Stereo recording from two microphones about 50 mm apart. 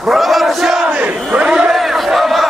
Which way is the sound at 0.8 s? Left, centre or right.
Right.